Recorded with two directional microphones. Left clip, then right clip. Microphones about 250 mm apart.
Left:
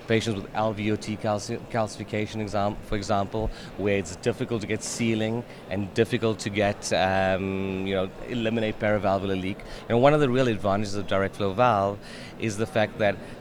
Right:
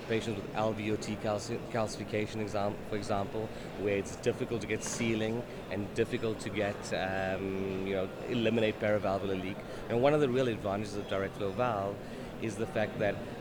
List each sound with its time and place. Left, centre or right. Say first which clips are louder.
0.1 s a man's voice: left 8 dB; left
8.4 s a man's voice: left 3 dB; left